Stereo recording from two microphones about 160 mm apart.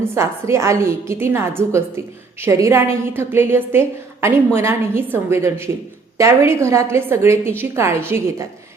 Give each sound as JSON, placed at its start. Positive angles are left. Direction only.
{"t": 0.0, "sound": "a woman's voice", "side_deg": -15}